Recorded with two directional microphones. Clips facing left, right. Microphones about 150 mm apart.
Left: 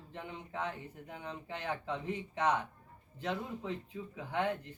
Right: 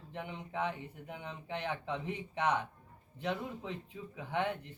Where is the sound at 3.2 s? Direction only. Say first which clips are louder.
Even; 20° right (ahead or behind).